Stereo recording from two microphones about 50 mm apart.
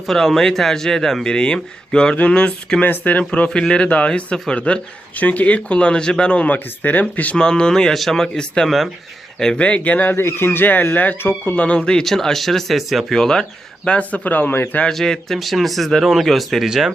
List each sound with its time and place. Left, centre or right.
0.1 s speech: centre
2.8 s a man's voice: left
3.5 s speech: centre
6.5 s a man's voice: left
7.3 s speech: centre
8.4 s speech: centre
10.2 s a man's voice: left
11.2 s speech: left
11.5 s speech: left
12.0 s speech: centre
13.1 s speech: centre
14.0 s a man's voice: left
14.8 s speech: centre
16.6 s speech: centre